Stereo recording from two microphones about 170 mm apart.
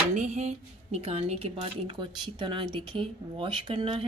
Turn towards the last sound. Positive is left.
turn(degrees=-30)  # may be behind; listen again after turning